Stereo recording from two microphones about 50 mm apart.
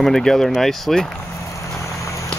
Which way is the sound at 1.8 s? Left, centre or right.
Left.